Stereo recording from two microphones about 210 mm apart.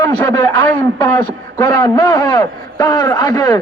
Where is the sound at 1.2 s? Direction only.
20° left (ahead or behind).